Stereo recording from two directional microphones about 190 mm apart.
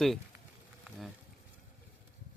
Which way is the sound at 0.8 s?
Centre (ahead or behind).